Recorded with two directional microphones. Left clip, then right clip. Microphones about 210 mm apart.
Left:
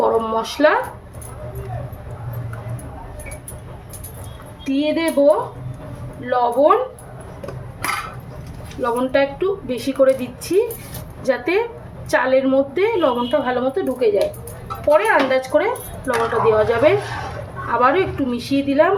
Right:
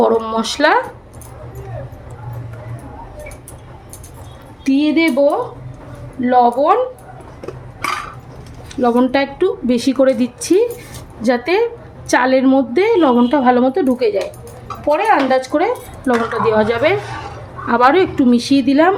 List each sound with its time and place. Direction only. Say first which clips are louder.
0.0 s speech: right 3 dB; 50° right (ahead or behind)
4.6 s a woman's voice: right 5 dB; 50° right (ahead or behind)
8.7 s a woman's voice: right 4 dB; 50° right (ahead or behind)